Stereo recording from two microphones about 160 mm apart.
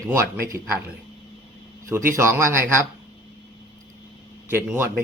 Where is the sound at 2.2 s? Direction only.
15° right (ahead or behind).